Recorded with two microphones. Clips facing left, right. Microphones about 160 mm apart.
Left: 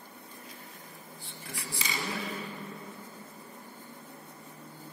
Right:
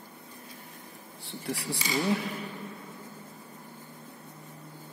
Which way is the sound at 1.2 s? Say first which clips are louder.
Right 10 dB; 75° right (ahead or behind).